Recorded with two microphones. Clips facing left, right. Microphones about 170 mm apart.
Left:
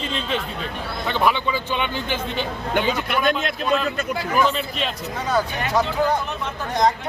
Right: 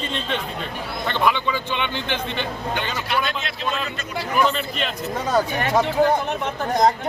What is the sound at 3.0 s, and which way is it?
Speech, 50° left (ahead or behind).